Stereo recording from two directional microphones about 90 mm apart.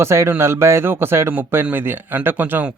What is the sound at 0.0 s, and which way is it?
Speech, 30° right (ahead or behind).